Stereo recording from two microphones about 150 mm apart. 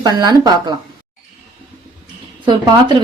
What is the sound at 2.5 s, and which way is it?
Speech, 30° right (ahead or behind).